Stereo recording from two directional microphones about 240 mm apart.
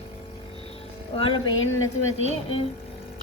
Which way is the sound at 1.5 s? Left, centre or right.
Left.